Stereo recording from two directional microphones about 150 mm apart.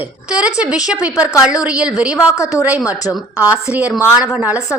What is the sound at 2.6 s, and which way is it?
Speech, 20° left (ahead or behind).